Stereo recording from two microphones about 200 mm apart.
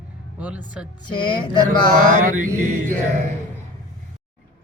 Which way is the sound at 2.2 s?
40° right (ahead or behind).